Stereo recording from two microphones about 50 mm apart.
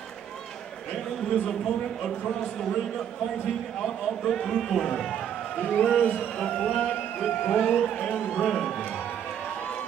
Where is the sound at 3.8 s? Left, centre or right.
Centre.